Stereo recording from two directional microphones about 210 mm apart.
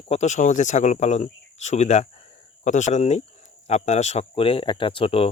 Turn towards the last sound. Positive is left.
turn(degrees=25)  # may be behind; listen again after turning